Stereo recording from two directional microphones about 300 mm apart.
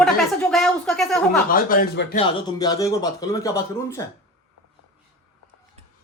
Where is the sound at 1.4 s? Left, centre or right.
Left.